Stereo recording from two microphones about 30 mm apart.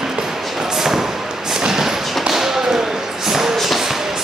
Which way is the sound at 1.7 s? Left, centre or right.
Centre.